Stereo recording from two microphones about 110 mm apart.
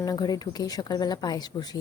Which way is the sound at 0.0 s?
35° left (ahead or behind).